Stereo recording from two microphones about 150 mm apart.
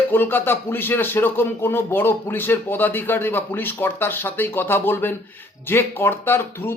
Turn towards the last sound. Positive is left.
turn(degrees=15)  # may be behind; listen again after turning